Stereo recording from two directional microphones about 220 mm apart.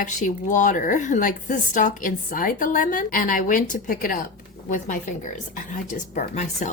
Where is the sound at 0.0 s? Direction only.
35° left (ahead or behind).